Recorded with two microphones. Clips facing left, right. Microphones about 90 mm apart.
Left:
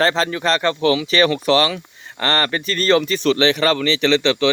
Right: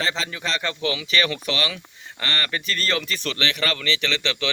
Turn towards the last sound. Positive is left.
turn(degrees=25)  # may be behind; listen again after turning